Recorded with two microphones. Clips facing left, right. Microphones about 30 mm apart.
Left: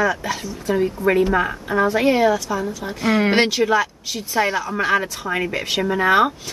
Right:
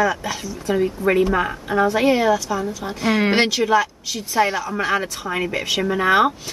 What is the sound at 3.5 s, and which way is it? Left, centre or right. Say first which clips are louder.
A woman's voice: even; centre.